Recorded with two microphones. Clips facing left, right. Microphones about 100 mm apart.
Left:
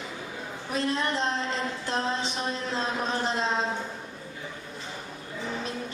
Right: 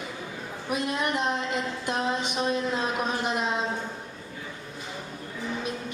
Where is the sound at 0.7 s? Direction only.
15° right (ahead or behind).